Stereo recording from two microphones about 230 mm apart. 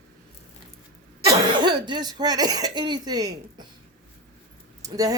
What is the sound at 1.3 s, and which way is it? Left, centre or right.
Speech, centre.